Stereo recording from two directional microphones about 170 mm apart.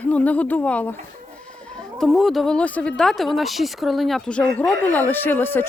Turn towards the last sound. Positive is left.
turn(degrees=10)  # may be behind; listen again after turning